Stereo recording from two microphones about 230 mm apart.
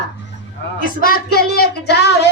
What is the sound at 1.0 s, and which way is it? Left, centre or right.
A woman's voice, left.